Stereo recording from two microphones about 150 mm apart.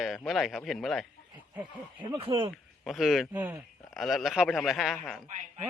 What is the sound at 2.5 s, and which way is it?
Speech, centre (ahead or behind).